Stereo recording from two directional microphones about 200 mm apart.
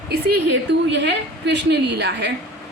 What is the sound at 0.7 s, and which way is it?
A woman's voice, 60° right (ahead or behind).